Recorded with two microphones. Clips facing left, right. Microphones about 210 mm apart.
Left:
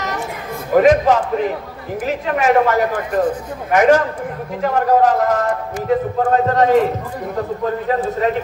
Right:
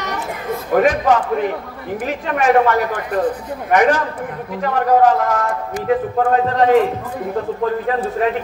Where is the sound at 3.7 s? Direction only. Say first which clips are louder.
Left 2 dB; 45° left (ahead or behind).